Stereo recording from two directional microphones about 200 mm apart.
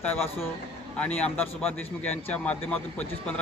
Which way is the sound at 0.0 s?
10° left (ahead or behind).